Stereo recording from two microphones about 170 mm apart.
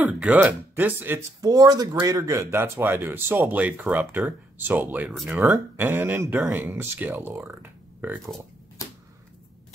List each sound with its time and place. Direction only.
0.0 s speech: 5° right (ahead or behind)